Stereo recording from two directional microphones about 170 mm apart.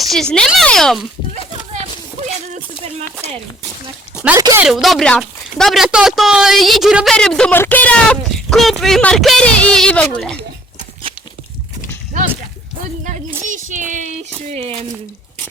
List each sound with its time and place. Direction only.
0.0 s speech: centre (ahead or behind)
4.2 s speech: 10° right (ahead or behind)
13.4 s a child's voice: 50° right (ahead or behind)
14.5 s speech: 35° right (ahead or behind)